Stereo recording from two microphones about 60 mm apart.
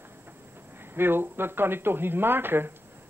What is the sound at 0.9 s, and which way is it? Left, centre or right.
Speech, right.